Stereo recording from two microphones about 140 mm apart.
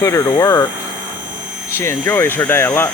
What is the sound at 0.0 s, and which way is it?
Speech, 20° left (ahead or behind).